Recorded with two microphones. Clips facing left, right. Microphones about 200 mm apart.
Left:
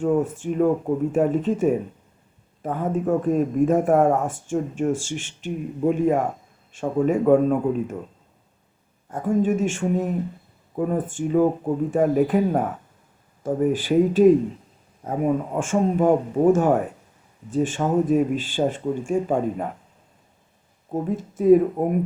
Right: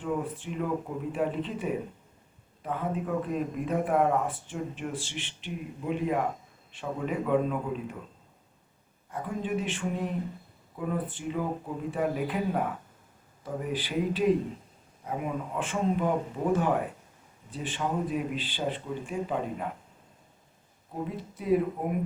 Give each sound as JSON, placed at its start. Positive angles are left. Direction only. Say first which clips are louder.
{"t": 0.0, "sound": "speech", "louder": "left 10 dB", "side_deg": 45}
{"t": 9.0, "sound": "speech", "louder": "left 11 dB", "side_deg": 45}
{"t": 20.9, "sound": "speech", "louder": "left 9 dB", "side_deg": 45}